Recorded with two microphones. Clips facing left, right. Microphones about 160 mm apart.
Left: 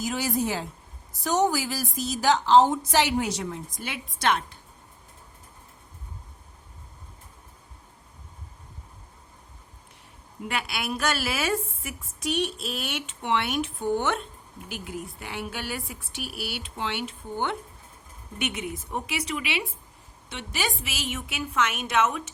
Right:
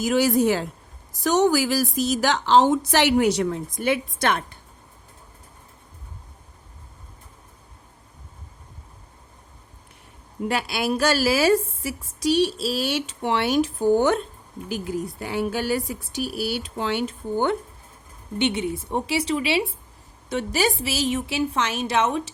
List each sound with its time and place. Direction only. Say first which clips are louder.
0.0 s a woman's voice: right 8 dB; 80° right; by 4.5 s 55° right (ahead or behind)
10.5 s a woman's voice: right 6 dB; 35° right (ahead or behind)
18.3 s a woman's voice: right 8 dB; 30° right (ahead or behind)